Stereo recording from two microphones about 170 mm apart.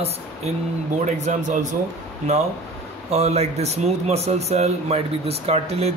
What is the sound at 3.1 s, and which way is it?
Speech, 40° right (ahead or behind).